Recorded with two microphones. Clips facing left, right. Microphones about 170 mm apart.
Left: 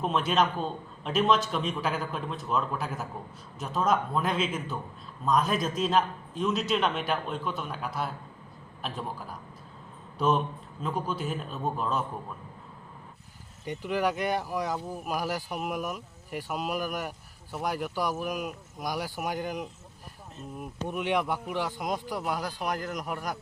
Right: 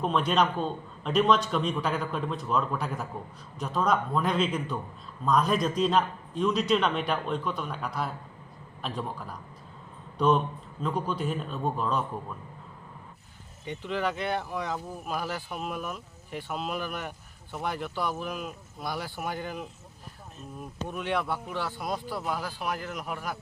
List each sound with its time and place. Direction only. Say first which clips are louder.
0.0 s a man's voice: right 1 dB; 5° left (ahead or behind)
10.2 s a man's voice: right 2 dB; 5° left (ahead or behind)
13.7 s speech: left 2 dB; 10° left (ahead or behind)